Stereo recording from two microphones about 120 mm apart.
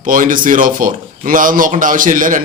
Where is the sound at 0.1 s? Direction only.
90° right.